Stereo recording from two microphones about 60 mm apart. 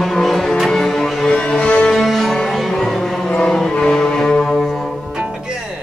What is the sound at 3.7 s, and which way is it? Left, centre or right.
Music, centre.